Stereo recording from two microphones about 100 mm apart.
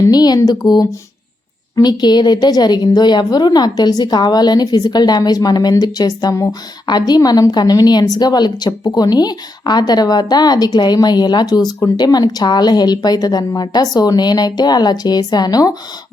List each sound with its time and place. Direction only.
0.0 s a woman's voice: 40° left (ahead or behind)